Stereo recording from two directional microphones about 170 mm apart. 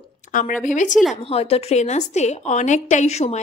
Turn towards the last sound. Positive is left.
turn(degrees=40)  # may be behind; listen again after turning